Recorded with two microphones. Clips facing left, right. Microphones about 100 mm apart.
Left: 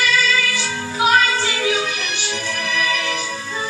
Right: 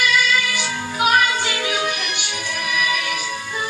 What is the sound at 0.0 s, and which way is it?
Music, 15° right (ahead or behind).